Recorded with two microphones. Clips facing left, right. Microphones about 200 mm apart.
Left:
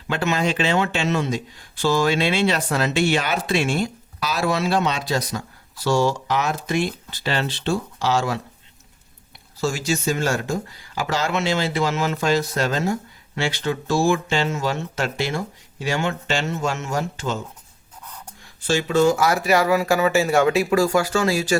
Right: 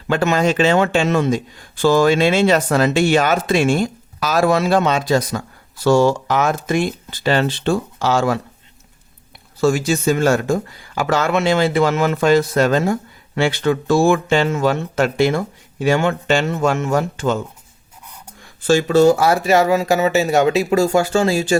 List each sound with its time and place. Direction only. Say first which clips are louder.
0.1 s speech: right 6 dB; 45° right (ahead or behind)
9.6 s speech: right 7 dB; 55° right (ahead or behind)
18.7 s speech: right 6 dB; 45° right (ahead or behind); by 21.6 s 25° right (ahead or behind)